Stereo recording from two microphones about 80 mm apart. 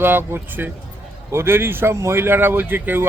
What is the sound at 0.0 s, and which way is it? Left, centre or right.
Speech, right.